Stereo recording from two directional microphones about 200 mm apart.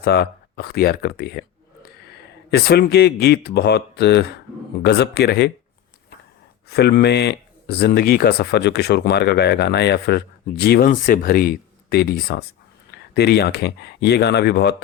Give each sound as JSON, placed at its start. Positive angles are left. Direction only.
{"t": 0.0, "sound": "speech", "side_deg": 55}
{"t": 6.7, "sound": "speech", "side_deg": 55}